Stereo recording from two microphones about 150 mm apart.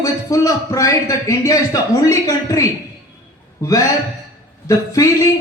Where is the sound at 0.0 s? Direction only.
25° left (ahead or behind).